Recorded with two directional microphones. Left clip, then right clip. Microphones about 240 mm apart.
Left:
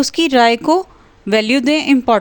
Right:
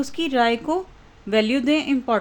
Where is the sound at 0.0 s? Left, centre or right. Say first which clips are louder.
Left 9 dB; left.